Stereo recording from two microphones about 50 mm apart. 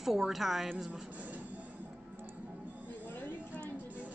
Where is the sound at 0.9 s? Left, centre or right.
Right.